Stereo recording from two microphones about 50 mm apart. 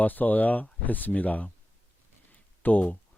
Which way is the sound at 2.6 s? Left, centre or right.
Left.